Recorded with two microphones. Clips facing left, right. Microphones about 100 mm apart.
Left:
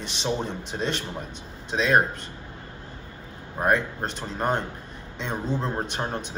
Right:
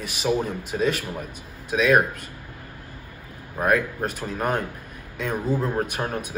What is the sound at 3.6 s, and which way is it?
A man's voice, 25° left (ahead or behind).